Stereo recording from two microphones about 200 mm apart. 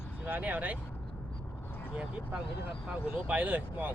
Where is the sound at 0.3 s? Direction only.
10° right (ahead or behind).